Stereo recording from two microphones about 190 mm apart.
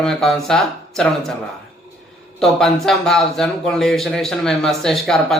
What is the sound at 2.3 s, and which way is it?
A man's voice, 5° left (ahead or behind).